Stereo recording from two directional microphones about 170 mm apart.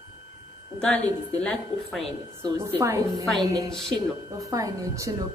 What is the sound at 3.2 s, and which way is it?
Speech, centre (ahead or behind).